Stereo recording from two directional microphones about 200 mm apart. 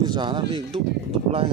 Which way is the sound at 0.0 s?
20° right (ahead or behind).